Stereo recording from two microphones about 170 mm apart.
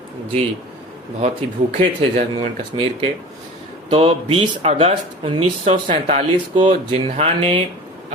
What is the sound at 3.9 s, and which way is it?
Speech, 35° right (ahead or behind).